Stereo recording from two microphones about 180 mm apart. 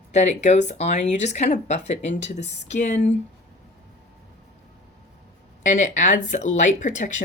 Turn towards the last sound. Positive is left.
turn(degrees=45)  # may be behind; listen again after turning